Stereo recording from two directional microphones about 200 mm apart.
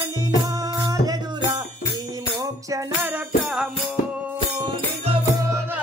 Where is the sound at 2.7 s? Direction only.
10° right (ahead or behind).